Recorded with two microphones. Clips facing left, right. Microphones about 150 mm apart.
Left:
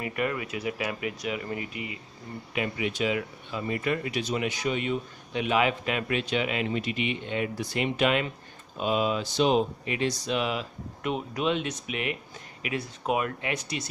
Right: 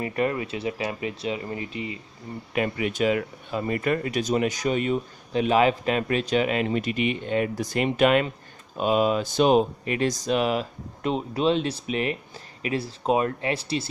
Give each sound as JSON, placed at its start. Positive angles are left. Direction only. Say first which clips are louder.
{"t": 0.0, "sound": "speech", "louder": "right 4 dB", "side_deg": -30}
{"t": 2.5, "sound": "speech", "louder": "right 4 dB", "side_deg": -45}
{"t": 11.1, "sound": "speech", "louder": "right 5 dB", "side_deg": -30}